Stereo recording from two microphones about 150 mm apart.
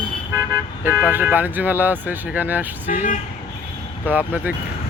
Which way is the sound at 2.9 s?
60° left (ahead or behind).